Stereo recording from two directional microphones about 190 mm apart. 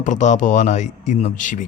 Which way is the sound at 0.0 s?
40° left (ahead or behind).